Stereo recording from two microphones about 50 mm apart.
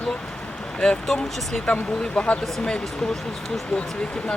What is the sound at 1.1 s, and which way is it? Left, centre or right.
Speech, centre.